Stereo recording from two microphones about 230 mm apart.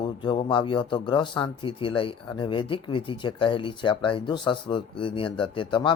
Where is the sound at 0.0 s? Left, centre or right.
Left.